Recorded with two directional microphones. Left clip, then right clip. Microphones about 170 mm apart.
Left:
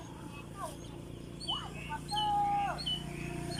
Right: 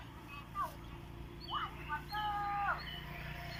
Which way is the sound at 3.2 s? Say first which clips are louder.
Left 5 dB; 85° left.